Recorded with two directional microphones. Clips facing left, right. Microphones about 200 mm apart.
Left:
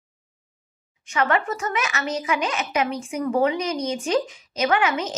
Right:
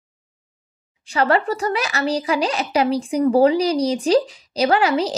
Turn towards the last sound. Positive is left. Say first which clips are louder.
# right 4 dB
turn(degrees=-35)  # may be behind; listen again after turning